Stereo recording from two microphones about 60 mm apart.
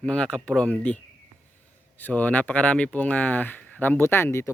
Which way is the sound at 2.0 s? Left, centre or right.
Left.